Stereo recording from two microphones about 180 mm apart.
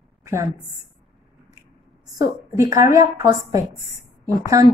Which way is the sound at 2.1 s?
20° right (ahead or behind).